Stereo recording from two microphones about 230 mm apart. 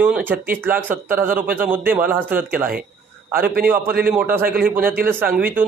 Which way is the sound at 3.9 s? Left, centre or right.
Right.